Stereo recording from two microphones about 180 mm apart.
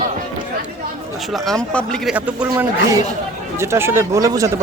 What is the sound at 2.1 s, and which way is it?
Speech, 10° right (ahead or behind).